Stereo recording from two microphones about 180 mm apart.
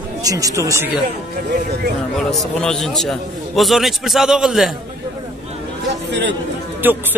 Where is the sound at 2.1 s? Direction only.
Centre (ahead or behind).